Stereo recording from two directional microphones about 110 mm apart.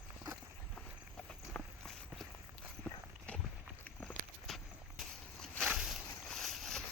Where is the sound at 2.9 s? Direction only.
15° left (ahead or behind).